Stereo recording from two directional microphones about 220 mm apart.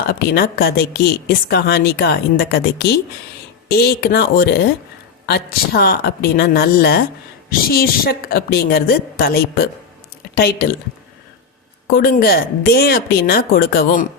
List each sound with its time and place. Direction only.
0.1 s a woman's voice: 45° left (ahead or behind)
11.9 s a woman's voice: 45° left (ahead or behind)